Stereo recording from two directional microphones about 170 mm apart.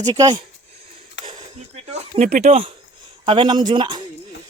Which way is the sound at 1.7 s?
45° right (ahead or behind).